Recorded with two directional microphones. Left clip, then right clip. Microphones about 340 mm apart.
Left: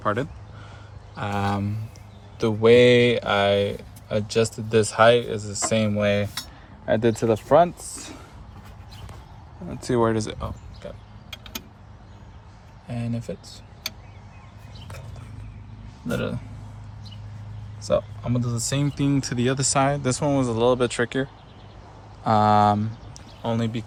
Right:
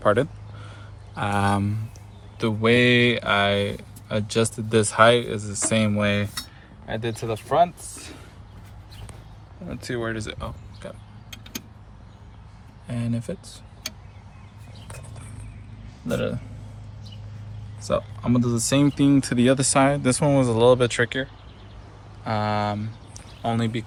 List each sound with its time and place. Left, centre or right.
0.0 s a sound: centre
2.4 s speech: centre
6.8 s speech: left
9.6 s speech: centre
12.9 s speech: centre
16.0 s speech: centre
17.9 s speech: centre